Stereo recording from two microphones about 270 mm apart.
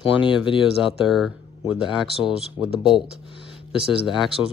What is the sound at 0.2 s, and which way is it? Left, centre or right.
Speech, centre.